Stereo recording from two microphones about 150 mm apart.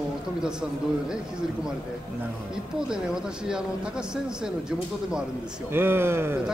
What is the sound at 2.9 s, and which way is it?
A man's voice, 5° right (ahead or behind).